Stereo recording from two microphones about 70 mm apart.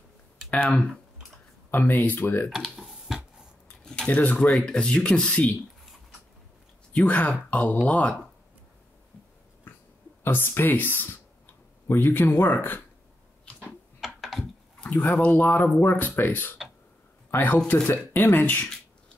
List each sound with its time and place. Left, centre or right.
1.7 s speech: left
2.5 s speech: centre
3.8 s a sound: centre
4.1 s speech: left
4.5 s speech: centre
6.9 s speech: centre
10.2 s speech: left
14.0 s typing: centre
14.8 s a sound: centre
15.1 s speech: left